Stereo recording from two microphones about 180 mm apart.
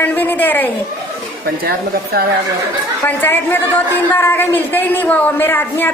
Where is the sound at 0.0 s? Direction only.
10° left (ahead or behind).